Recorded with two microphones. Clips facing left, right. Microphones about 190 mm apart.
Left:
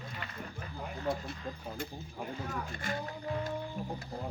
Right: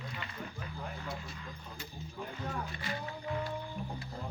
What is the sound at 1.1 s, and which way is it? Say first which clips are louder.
Speech: left 11 dB; 55° left (ahead or behind).